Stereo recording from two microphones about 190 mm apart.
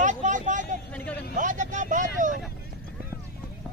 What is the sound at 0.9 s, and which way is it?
Vehicle, 5° left (ahead or behind).